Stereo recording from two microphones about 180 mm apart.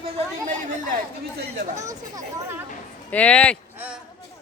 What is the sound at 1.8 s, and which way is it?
Speech, 20° right (ahead or behind).